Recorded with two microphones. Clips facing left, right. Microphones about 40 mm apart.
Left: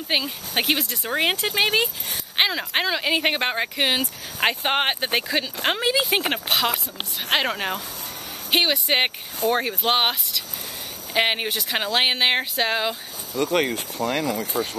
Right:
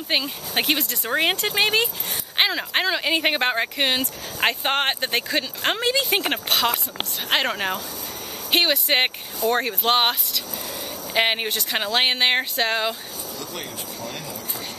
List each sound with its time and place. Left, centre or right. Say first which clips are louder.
0.1 s speech: even; centre
13.4 s speech: left 15 dB; left